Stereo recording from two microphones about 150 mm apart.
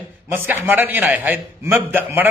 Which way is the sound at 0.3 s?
15° right (ahead or behind).